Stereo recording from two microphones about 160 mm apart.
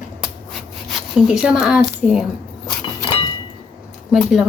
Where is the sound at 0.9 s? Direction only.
5° right (ahead or behind).